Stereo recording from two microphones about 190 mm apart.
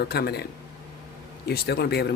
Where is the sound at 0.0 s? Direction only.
55° left (ahead or behind).